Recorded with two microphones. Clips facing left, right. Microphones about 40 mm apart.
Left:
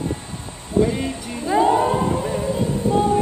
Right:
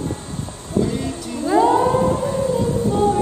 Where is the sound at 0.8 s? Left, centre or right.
Left.